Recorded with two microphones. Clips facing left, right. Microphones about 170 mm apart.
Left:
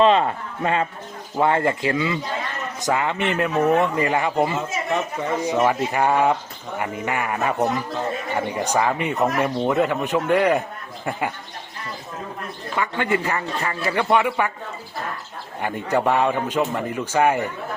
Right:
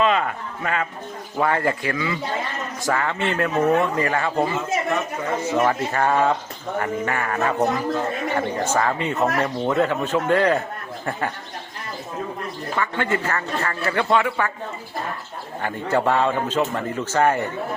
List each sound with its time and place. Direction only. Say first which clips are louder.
0.0 s a man's voice: left 4 dB; 30° left (ahead or behind); by 7.5 s 15° left (ahead or behind)
8.5 s speech: even; 15° left (ahead or behind)
12.7 s speech: left 1 dB; 15° left (ahead or behind)
15.6 s speech: even; 15° left (ahead or behind)